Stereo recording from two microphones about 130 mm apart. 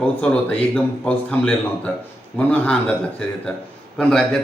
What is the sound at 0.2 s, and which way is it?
Speech, 10° left (ahead or behind).